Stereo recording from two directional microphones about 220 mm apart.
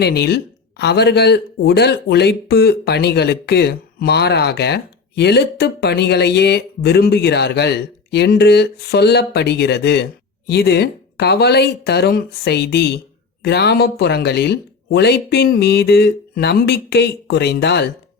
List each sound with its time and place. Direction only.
0.0 s speech: 50° left (ahead or behind)